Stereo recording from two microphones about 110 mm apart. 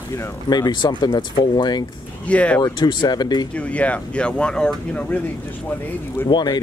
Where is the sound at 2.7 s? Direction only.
40° left (ahead or behind).